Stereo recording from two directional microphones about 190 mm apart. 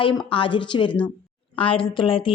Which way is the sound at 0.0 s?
25° left (ahead or behind).